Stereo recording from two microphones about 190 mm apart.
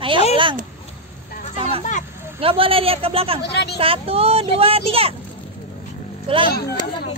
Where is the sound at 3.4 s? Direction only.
60° left (ahead or behind).